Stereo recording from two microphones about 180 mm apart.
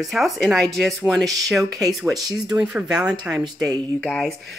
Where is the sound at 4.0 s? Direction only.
Centre (ahead or behind).